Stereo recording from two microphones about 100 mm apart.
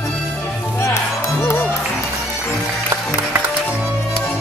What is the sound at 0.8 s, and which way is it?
Music, 30° left (ahead or behind).